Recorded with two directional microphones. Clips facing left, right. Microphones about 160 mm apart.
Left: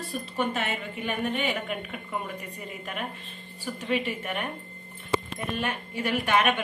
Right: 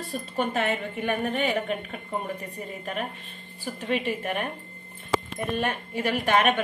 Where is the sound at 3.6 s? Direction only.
40° right (ahead or behind).